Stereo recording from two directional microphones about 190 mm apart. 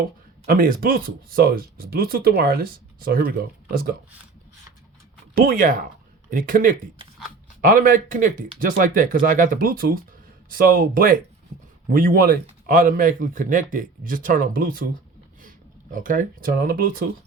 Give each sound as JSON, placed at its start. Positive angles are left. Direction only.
{"t": 0.4, "sound": "speech", "side_deg": -50}
{"t": 5.3, "sound": "speech", "side_deg": -50}